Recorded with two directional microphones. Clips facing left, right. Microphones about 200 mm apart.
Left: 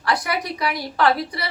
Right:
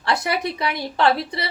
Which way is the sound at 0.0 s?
25° right (ahead or behind).